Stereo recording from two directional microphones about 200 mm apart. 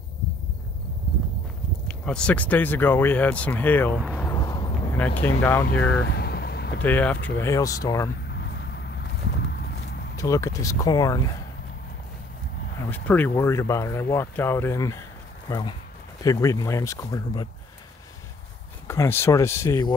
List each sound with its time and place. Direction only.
1.9 s speech: 5° left (ahead or behind)
4.0 s speech: centre (ahead or behind)
4.3 s vehicle: 20° left (ahead or behind)
4.9 s speech: 10° left (ahead or behind)
6.0 s vehicle: 50° left (ahead or behind)
6.8 s speech: 10° left (ahead or behind)
8.3 s a sound: 55° left (ahead or behind)
10.1 s speech: 15° left (ahead or behind)
12.8 s speech: 10° left (ahead or behind)
18.9 s speech: 10° left (ahead or behind)